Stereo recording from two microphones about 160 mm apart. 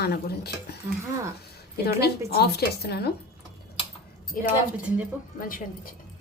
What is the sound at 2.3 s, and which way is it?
Speech, 80° left.